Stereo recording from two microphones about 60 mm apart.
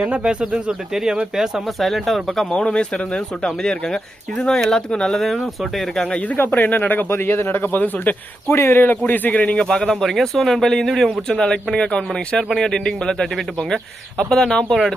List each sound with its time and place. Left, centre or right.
0.0 s speech: right
0.5 s speech: centre
2.5 s speech: centre
6.1 s speech: left
8.4 s speech: left
9.6 s speech: centre